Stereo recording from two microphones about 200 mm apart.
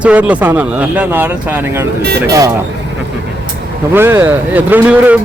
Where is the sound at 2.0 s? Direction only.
55° right (ahead or behind).